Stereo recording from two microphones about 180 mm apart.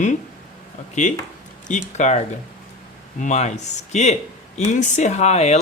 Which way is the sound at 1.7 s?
40° left (ahead or behind).